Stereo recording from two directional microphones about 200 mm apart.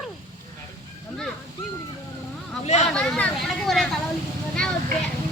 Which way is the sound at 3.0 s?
5° left (ahead or behind).